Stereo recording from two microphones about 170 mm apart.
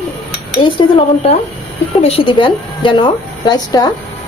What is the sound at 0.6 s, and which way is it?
Speech, 30° left (ahead or behind).